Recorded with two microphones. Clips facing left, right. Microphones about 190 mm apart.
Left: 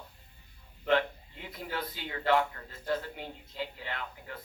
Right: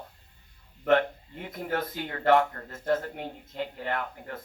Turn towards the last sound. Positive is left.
turn(degrees=-50)  # may be behind; listen again after turning